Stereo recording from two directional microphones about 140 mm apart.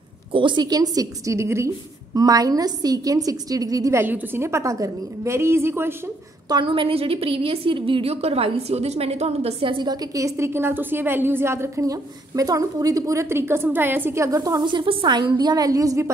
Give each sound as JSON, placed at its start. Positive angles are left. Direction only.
{"t": 0.3, "sound": "a woman's voice", "side_deg": -35}
{"t": 6.5, "sound": "a woman's voice", "side_deg": -40}